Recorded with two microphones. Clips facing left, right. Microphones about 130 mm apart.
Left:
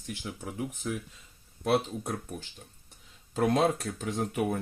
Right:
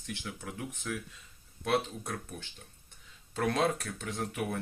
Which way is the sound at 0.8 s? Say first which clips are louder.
Left 3 dB; 30° left (ahead or behind).